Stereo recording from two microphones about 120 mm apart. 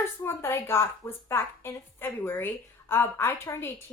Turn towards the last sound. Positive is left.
turn(degrees=20)  # may be behind; listen again after turning